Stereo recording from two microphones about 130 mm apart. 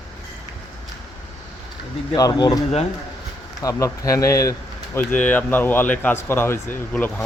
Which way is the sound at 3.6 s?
25° left (ahead or behind).